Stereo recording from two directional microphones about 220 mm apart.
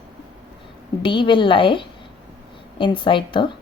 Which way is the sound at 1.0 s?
20° left (ahead or behind).